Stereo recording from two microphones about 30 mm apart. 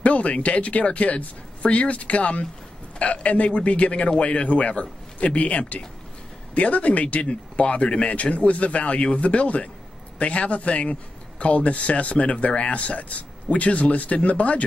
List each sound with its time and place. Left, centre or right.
0.0 s speech: left
7.2 s a man's voice: left